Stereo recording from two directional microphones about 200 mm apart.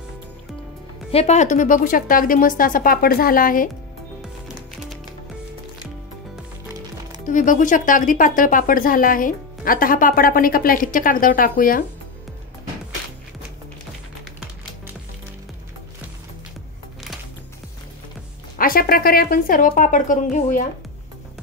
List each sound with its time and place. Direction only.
1.1 s speech: 35° left (ahead or behind)
7.2 s speech: 40° left (ahead or behind)
18.6 s speech: 45° left (ahead or behind)